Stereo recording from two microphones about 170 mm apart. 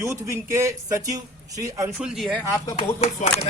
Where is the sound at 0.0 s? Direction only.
15° right (ahead or behind).